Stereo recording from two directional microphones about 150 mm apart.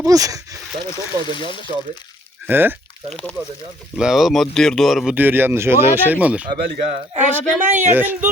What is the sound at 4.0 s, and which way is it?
Speech, centre (ahead or behind).